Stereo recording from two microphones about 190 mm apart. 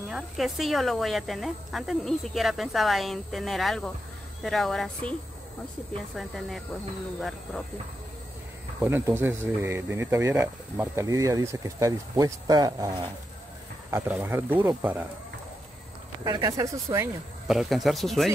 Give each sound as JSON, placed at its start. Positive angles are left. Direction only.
{"t": 0.1, "sound": "speech", "side_deg": 0}
{"t": 6.1, "sound": "speech", "side_deg": 0}
{"t": 8.8, "sound": "speech", "side_deg": -15}
{"t": 16.3, "sound": "speech", "side_deg": -20}
{"t": 17.5, "sound": "speech", "side_deg": 0}